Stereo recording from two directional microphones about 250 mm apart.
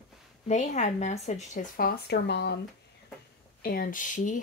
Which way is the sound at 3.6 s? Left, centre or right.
Left.